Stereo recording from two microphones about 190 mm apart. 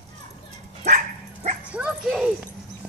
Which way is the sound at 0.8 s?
40° right (ahead or behind).